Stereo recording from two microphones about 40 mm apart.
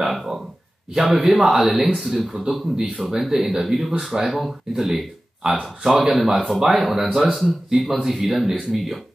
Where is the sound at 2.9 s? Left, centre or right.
Centre.